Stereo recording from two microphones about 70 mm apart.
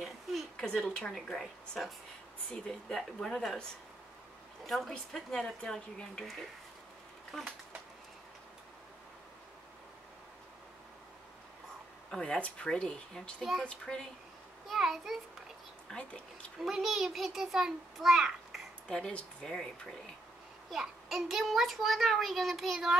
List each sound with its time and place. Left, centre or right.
0.0 s a sound: centre
0.7 s speech: centre
2.6 s speech: centre
4.6 s a child's voice: centre
7.3 s a child's voice: centre
12.1 s speech: centre
13.4 s a child's voice: centre
13.7 s speech: centre
14.7 s a child's voice: centre
15.9 s speech: centre
16.5 s a child's voice: centre
18.9 s speech: centre
20.7 s a child's voice: centre